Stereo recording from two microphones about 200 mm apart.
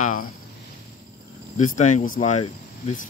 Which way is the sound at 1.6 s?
35° left (ahead or behind).